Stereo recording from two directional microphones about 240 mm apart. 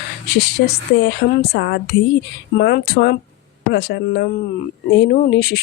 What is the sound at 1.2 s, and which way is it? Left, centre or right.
Speech, left.